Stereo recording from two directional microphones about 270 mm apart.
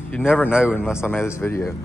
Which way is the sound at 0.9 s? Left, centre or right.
Centre.